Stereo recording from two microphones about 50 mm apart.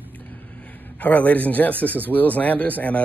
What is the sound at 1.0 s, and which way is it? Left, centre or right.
Speech, left.